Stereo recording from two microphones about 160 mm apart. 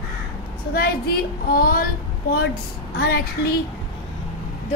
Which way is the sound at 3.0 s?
90° left.